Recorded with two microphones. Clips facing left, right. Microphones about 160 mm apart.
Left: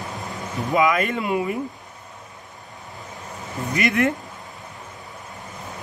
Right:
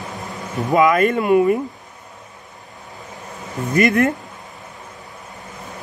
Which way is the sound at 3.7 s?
45° right (ahead or behind).